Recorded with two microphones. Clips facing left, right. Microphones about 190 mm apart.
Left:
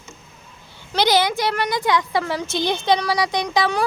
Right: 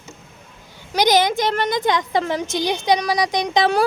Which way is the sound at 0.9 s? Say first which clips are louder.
Right 2 dB; 20° right (ahead or behind).